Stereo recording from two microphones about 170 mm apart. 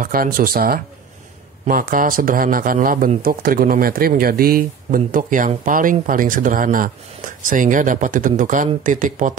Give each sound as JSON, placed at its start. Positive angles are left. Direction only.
{"t": 0.0, "sound": "speech", "side_deg": -55}